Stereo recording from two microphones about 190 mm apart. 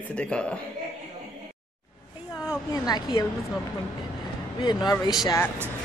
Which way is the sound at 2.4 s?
20° left (ahead or behind).